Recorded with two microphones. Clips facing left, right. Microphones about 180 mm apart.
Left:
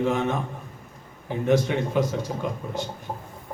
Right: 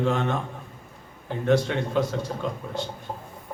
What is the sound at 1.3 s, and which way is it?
Speech, 15° left (ahead or behind).